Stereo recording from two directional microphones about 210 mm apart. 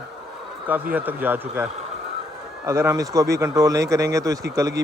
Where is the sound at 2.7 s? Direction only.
15° right (ahead or behind).